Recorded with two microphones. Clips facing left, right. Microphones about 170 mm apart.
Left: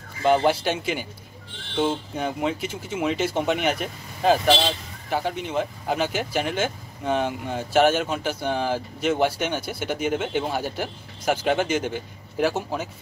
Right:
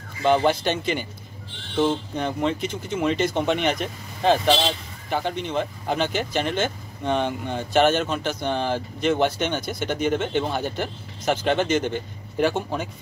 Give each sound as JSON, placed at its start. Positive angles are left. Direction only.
{"t": 0.2, "sound": "speech", "side_deg": 5}